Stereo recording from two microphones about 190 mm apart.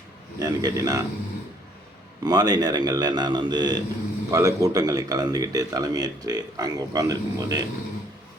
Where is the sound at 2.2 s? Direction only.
20° right (ahead or behind).